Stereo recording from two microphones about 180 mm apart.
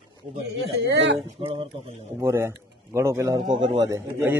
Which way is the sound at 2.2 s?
15° right (ahead or behind).